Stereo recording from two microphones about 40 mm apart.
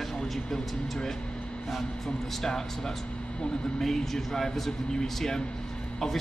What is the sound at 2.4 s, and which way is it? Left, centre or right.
Speech, centre.